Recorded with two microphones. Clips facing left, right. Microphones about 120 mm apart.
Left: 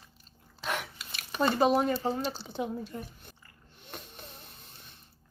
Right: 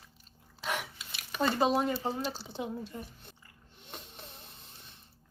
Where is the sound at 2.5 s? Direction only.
25° right (ahead or behind).